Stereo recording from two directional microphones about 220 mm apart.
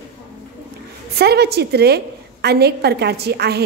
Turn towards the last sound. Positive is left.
turn(degrees=-45)  # may be behind; listen again after turning